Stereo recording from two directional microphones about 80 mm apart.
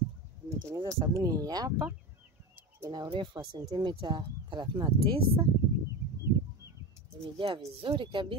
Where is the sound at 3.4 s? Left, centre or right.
Right.